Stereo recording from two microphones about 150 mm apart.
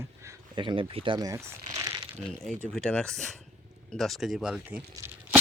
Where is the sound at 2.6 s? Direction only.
10° left (ahead or behind).